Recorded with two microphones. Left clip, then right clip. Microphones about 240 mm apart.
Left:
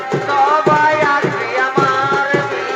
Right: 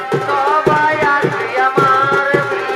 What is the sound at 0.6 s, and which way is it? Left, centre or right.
Music, centre.